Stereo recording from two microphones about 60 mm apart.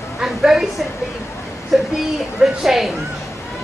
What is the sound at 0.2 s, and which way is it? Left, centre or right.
Speech, centre.